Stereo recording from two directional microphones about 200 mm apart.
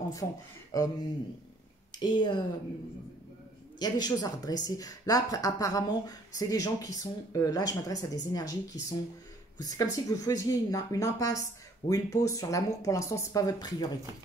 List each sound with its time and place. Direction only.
0.1 s speech: 20° left (ahead or behind)
2.0 s speech: 20° left (ahead or behind)
3.8 s speech: 20° left (ahead or behind)